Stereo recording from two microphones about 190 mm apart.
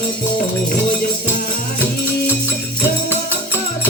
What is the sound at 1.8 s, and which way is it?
Music, 10° left (ahead or behind).